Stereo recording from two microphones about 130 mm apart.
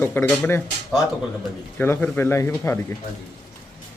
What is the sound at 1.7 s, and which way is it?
A man's voice, 15° left (ahead or behind).